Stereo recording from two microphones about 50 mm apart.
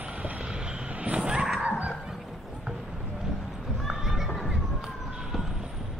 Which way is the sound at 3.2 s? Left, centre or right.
Centre.